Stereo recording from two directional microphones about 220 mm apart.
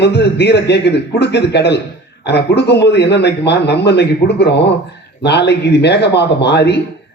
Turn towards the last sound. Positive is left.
turn(degrees=50)  # may be behind; listen again after turning